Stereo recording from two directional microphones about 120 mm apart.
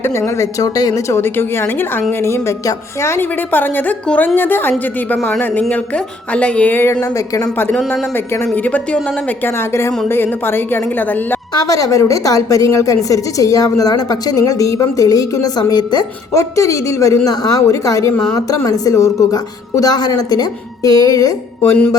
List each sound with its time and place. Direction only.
0.0 s a woman's voice: 25° left (ahead or behind)
7.0 s a woman's voice: 30° left (ahead or behind)
7.5 s a woman's voice: 15° left (ahead or behind)
11.5 s a woman's voice: 30° left (ahead or behind)